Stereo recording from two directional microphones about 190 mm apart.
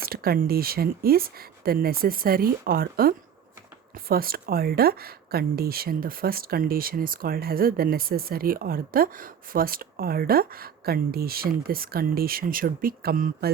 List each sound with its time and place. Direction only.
0.0 s speech: 50° right (ahead or behind)